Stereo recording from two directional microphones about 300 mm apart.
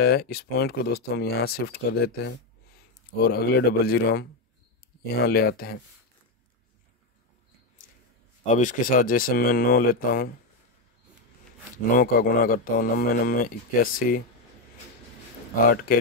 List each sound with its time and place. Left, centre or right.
0.0 s speech: left
8.5 s speech: left
12.0 s speech: left